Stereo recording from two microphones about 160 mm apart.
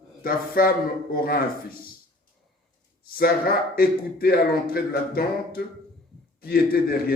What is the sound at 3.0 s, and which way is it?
Speech, 70° left (ahead or behind).